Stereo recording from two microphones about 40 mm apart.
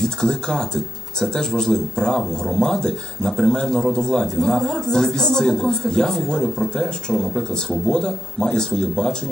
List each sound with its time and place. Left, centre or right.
0.0 s a man's voice: centre